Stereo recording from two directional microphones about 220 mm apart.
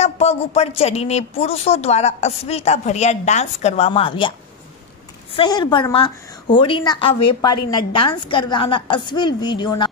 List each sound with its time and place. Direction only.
0.0 s a woman's voice: 30° left (ahead or behind)
5.3 s a woman's voice: 20° left (ahead or behind)